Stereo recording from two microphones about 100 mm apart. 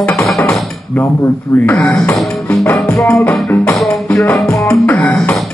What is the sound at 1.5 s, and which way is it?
Speech, 20° left (ahead or behind).